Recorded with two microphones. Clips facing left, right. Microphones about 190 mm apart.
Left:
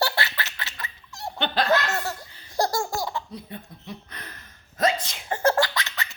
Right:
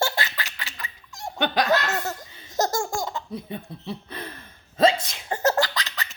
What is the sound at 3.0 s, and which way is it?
Laughter, 20° right (ahead or behind).